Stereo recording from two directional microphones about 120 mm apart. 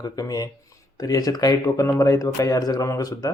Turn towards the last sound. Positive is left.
turn(degrees=30)  # may be behind; listen again after turning